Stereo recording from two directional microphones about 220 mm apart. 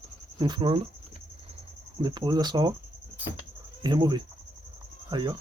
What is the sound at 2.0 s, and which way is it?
Speech, 20° right (ahead or behind).